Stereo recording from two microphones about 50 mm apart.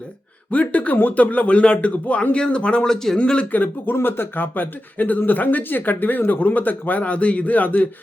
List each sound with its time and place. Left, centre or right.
0.5 s speech: left
2.8 s speech: centre
3.2 s speech: left
3.5 s speech: left
3.9 s speech: left